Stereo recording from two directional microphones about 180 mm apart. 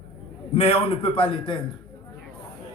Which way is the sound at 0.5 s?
35° left (ahead or behind).